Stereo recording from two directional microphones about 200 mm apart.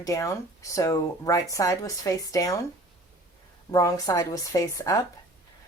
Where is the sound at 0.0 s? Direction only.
15° left (ahead or behind).